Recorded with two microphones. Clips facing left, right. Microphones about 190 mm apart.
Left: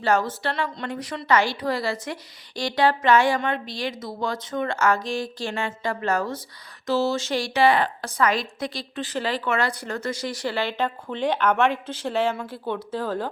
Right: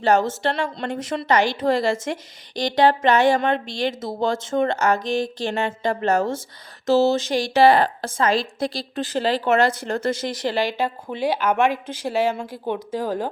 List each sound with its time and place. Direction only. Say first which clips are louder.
0.0 s a woman's voice: right 4 dB; 20° right (ahead or behind)
7.5 s a woman's voice: right 5 dB; 35° right (ahead or behind)
10.0 s speech: right 3 dB; 25° right (ahead or behind)